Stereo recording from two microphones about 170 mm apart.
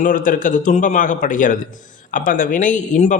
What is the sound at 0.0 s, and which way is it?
A man's voice, 55° left (ahead or behind).